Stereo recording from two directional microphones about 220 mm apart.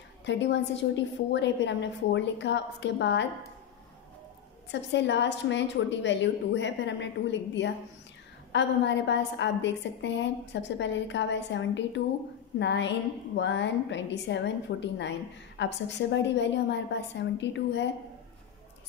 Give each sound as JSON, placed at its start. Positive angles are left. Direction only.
{"t": 0.2, "sound": "a woman's voice", "side_deg": 55}
{"t": 4.6, "sound": "a woman's voice", "side_deg": 55}